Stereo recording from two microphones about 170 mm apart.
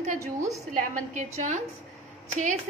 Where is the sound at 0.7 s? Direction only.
45° right (ahead or behind).